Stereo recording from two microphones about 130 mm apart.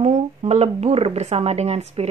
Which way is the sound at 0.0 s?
60° right (ahead or behind).